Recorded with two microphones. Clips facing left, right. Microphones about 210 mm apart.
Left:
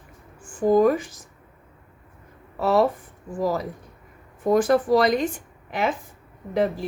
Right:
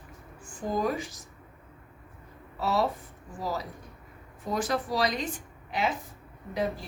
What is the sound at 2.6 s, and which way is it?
A woman's voice, 50° left (ahead or behind).